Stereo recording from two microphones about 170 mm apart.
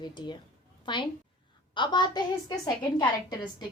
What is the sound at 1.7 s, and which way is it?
A woman's voice, 25° left (ahead or behind).